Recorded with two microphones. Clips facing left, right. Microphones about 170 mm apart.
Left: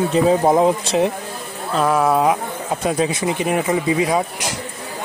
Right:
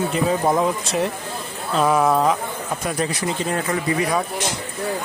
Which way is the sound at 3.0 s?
20° left (ahead or behind).